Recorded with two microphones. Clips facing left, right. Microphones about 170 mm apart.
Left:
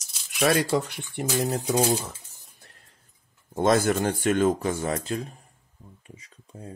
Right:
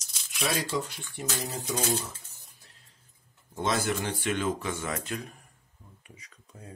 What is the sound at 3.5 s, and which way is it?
Speech, 50° left (ahead or behind).